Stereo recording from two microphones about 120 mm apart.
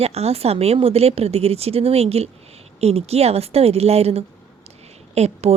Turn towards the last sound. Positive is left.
turn(degrees=-65)  # may be behind; listen again after turning